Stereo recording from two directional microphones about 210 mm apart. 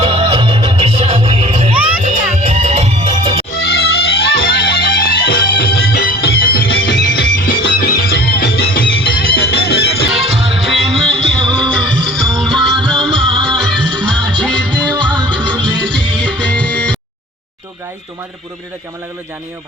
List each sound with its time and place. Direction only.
0.0 s music: 30° right (ahead or behind)
3.6 s music: 50° left (ahead or behind)
7.4 s music: 45° left (ahead or behind)
10.2 s music: 30° right (ahead or behind)
10.6 s music: centre (ahead or behind)
11.3 s music: 25° right (ahead or behind)
12.0 s music: centre (ahead or behind)
12.7 s music: 25° right (ahead or behind)
13.0 s music: centre (ahead or behind)
14.9 s music: 20° right (ahead or behind)
15.9 s music: 5° left (ahead or behind)